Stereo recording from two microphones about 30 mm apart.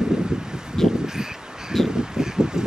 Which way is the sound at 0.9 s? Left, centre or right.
Centre.